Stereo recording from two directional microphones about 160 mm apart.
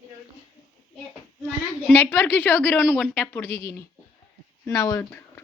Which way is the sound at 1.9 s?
15° left (ahead or behind).